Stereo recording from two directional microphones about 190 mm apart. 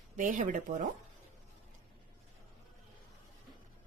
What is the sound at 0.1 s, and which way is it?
Speech, 45° right (ahead or behind).